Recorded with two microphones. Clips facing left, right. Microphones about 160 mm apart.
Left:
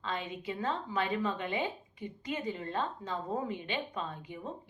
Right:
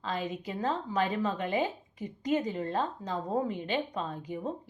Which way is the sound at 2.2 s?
40° right (ahead or behind).